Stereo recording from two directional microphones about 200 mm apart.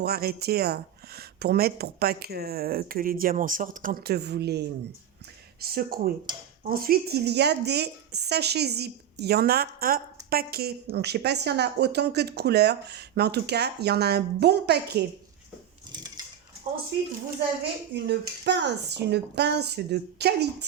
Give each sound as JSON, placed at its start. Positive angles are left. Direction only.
{"t": 0.0, "sound": "speech", "side_deg": -50}
{"t": 17.9, "sound": "speech", "side_deg": -60}